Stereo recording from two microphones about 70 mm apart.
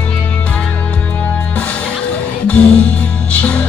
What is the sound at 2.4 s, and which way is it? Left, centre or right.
Music, centre.